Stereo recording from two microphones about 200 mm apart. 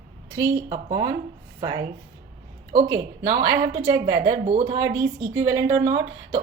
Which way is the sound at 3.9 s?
20° right (ahead or behind).